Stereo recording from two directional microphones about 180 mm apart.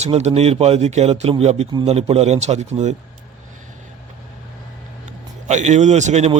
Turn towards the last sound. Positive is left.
turn(degrees=-40)  # may be behind; listen again after turning